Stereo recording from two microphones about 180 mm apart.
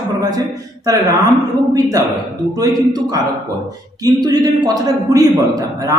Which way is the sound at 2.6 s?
20° right (ahead or behind).